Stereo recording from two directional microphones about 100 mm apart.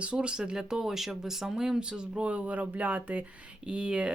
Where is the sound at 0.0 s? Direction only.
10° right (ahead or behind).